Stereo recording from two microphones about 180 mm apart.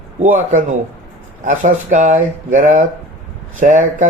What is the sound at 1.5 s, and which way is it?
Speech, 45° right (ahead or behind).